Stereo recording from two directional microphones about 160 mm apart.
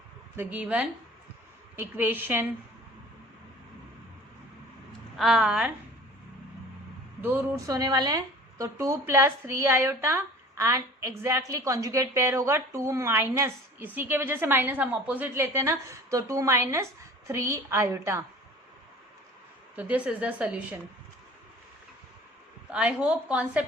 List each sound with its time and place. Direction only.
0.3 s a woman's voice: 10° right (ahead or behind)
5.1 s a woman's voice: centre (ahead or behind)
7.2 s a woman's voice: 10° right (ahead or behind)
19.7 s a woman's voice: 10° right (ahead or behind)
22.7 s a woman's voice: 5° right (ahead or behind)